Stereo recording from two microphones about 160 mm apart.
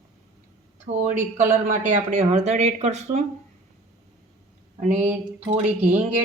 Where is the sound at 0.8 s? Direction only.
50° right (ahead or behind).